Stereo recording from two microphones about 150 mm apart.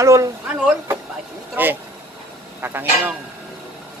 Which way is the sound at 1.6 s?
10° right (ahead or behind).